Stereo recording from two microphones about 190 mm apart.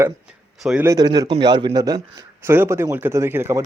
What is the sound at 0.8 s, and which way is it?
Speech, 20° right (ahead or behind).